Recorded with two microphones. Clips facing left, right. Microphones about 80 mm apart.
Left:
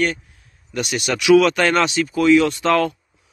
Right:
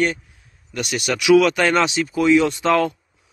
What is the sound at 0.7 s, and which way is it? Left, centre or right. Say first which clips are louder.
Speech: left 1 dB; centre.